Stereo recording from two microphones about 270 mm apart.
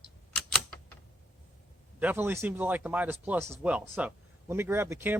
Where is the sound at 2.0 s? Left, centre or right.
Centre.